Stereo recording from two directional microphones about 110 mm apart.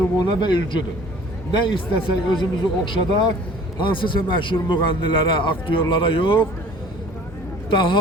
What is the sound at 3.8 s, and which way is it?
A man's voice, 50° left (ahead or behind).